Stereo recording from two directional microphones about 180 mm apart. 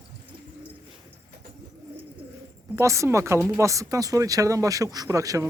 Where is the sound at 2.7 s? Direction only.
15° right (ahead or behind).